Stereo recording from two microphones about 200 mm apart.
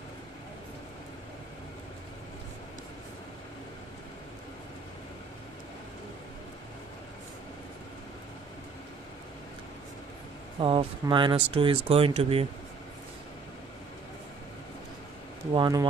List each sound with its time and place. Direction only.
10.6 s speech: 25° right (ahead or behind)
15.5 s speech: 20° right (ahead or behind)